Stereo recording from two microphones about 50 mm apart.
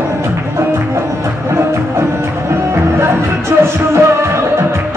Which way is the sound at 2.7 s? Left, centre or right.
Right.